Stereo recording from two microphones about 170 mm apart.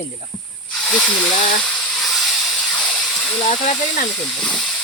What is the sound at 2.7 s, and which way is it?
Hiss, 5° left (ahead or behind).